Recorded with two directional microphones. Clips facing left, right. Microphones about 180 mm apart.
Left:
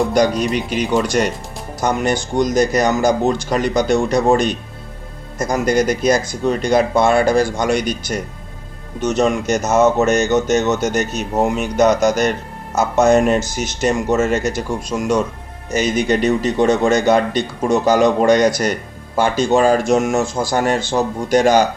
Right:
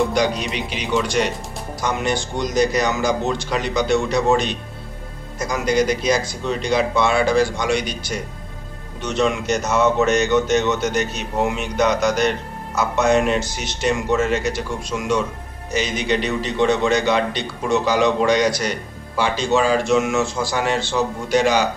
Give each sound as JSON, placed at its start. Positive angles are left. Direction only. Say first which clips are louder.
{"t": 0.1, "sound": "speech", "louder": "left 5 dB", "side_deg": 45}